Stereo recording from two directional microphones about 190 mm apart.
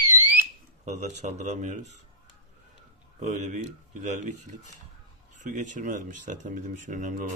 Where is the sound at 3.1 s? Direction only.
40° right (ahead or behind).